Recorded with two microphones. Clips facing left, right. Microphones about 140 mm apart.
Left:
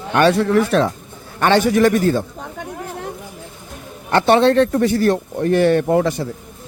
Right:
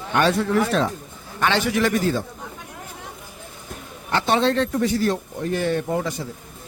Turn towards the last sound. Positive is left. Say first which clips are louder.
# left 8 dB
turn(degrees=65)  # may be behind; listen again after turning